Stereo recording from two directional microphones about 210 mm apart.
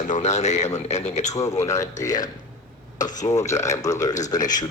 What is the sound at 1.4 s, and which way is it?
A man's voice, 15° left (ahead or behind).